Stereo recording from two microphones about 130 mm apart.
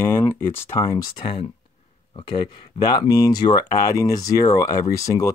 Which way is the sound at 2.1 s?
40° left (ahead or behind).